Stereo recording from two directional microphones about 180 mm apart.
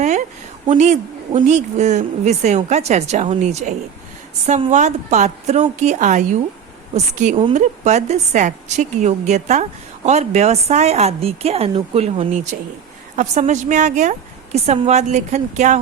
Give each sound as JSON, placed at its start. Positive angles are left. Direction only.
{"t": 0.7, "sound": "a woman's voice", "side_deg": -40}
{"t": 12.5, "sound": "a woman's voice", "side_deg": -45}